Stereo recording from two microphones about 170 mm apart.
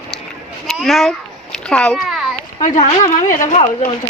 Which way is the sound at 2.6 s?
40° left (ahead or behind).